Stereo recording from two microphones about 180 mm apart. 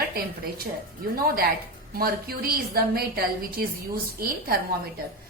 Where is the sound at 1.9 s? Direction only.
55° right (ahead or behind).